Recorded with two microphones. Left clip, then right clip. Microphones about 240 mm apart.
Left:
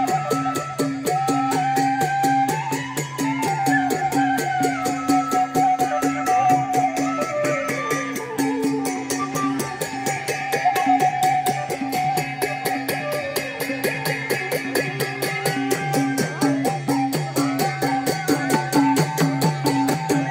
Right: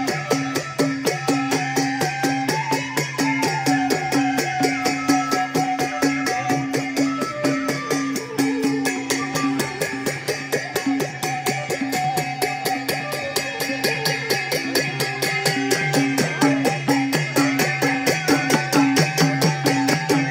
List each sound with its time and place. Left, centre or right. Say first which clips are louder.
0.0 s music: left 2 dB; right
5.9 s music: left 2 dB; centre
13.8 s music: right 2 dB; centre
16.4 s music: right 1 dB; right
18.3 s music: even; centre